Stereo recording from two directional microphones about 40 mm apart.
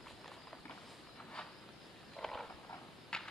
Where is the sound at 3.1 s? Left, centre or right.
Left.